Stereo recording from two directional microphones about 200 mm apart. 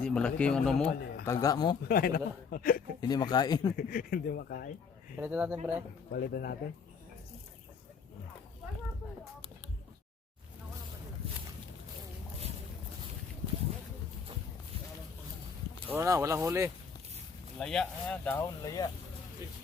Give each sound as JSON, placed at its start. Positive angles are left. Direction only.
{"t": 0.0, "sound": "speech", "side_deg": 5}
{"t": 1.2, "sound": "speech", "side_deg": 15}
{"t": 1.9, "sound": "speech", "side_deg": 45}
{"t": 3.0, "sound": "speech", "side_deg": 20}
{"t": 3.8, "sound": "speech", "side_deg": 45}
{"t": 5.1, "sound": "speech", "side_deg": -10}
{"t": 6.1, "sound": "speech", "side_deg": 50}
{"t": 15.9, "sound": "speech", "side_deg": -15}
{"t": 17.6, "sound": "speech", "side_deg": 5}